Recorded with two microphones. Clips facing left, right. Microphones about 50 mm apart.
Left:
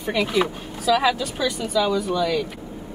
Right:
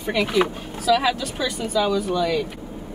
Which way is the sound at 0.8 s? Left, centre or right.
Centre.